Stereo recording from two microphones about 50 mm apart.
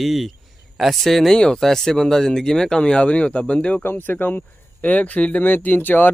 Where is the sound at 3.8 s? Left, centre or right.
Left.